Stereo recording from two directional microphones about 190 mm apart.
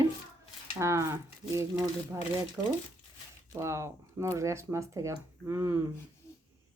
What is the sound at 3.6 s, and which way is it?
Speech, 15° right (ahead or behind).